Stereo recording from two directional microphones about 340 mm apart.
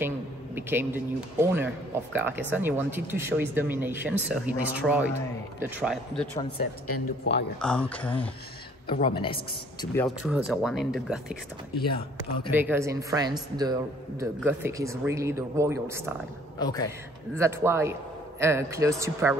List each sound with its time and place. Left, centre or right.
0.6 s speech: centre
6.9 s speech: left
7.6 s speech: centre
8.8 s a man's voice: centre
10.0 s speech: centre
16.5 s a man's voice: centre
17.4 s speech: centre